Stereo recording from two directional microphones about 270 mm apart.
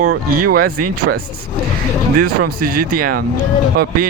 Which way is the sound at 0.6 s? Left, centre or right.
Right.